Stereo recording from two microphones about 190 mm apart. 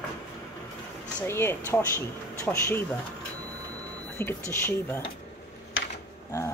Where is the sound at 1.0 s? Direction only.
10° left (ahead or behind).